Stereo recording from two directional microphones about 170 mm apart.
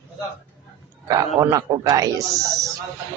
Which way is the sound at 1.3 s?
20° right (ahead or behind).